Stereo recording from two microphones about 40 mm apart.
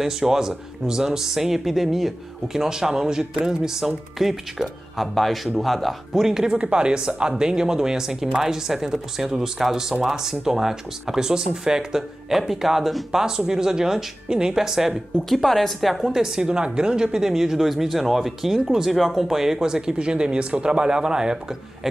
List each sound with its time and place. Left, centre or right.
0.0 s a woman's voice: centre
6.1 s speech: centre
6.5 s speech: right; by 15.0 s centre
15.2 s a woman's voice: centre
16.2 s speech: centre